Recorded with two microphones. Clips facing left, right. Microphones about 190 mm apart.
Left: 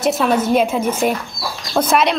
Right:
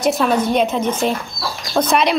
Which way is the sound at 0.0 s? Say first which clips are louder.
Even; centre (ahead or behind).